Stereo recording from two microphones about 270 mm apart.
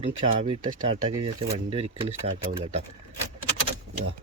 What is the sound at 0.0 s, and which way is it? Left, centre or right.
Speech, centre.